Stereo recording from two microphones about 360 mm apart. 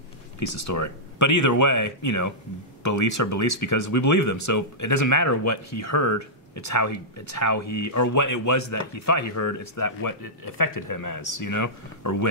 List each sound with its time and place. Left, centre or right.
0.7 s speech: left